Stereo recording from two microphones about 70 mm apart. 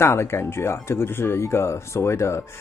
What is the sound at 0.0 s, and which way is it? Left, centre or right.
Speech, left.